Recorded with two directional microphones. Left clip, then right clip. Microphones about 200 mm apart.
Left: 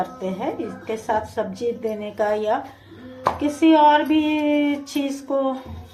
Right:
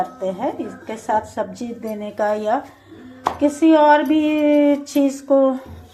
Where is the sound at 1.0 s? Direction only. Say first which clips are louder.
Right 3 dB; 15° right (ahead or behind).